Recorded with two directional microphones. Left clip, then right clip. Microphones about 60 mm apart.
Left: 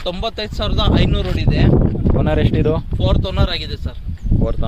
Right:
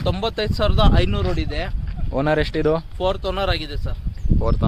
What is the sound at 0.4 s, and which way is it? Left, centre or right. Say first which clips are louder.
Speech: right 3 dB; right.